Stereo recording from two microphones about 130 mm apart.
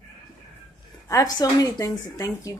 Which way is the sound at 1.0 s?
30° left (ahead or behind).